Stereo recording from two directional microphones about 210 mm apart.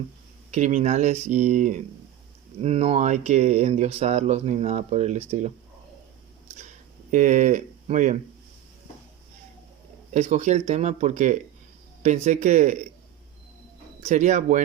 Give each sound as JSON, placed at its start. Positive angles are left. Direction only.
{"t": 0.5, "sound": "speech", "side_deg": -35}
{"t": 7.1, "sound": "speech", "side_deg": -35}
{"t": 10.1, "sound": "speech", "side_deg": -35}
{"t": 14.0, "sound": "speech", "side_deg": -35}